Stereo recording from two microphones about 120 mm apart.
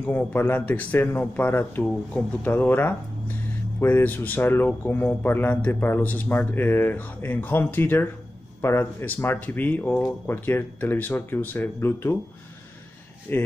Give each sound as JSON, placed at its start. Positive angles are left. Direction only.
{"t": 0.0, "sound": "speech", "side_deg": 15}
{"t": 13.3, "sound": "speech", "side_deg": 15}